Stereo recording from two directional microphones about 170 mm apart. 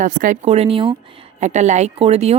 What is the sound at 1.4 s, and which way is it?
Speech, 45° right (ahead or behind).